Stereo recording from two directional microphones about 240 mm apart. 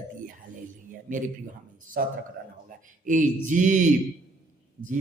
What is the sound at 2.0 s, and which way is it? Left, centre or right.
Speech, right.